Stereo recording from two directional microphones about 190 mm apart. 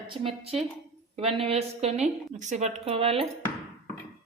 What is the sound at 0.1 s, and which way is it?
A woman's voice, 30° right (ahead or behind).